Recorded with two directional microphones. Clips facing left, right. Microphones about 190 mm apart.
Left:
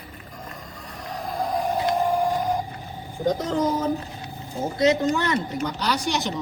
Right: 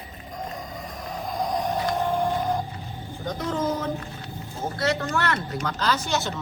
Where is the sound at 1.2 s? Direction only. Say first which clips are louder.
Left 1 dB; 5° left (ahead or behind).